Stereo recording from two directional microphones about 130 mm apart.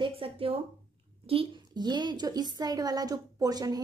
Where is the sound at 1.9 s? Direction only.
35° right (ahead or behind).